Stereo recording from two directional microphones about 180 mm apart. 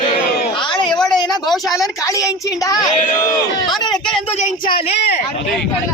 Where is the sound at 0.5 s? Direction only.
25° left (ahead or behind).